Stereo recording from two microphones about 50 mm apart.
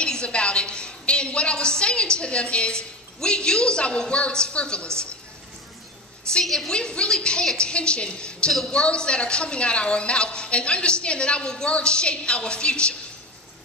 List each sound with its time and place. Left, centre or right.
0.0 s a sound: centre
6.4 s a woman's voice: centre
6.7 s a woman's voice: centre